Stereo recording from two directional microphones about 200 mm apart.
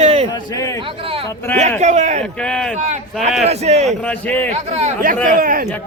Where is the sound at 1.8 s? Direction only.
35° right (ahead or behind).